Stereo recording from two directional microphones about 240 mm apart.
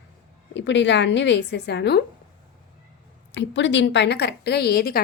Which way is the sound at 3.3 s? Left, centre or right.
Left.